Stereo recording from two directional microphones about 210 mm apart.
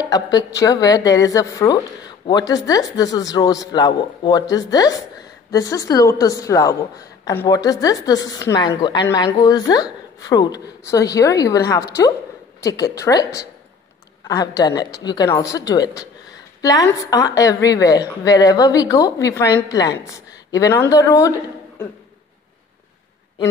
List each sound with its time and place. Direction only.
0.0 s a woman's voice: 20° left (ahead or behind)